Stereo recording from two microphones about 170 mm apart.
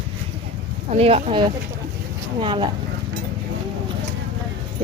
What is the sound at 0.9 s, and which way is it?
Speech, 35° right (ahead or behind).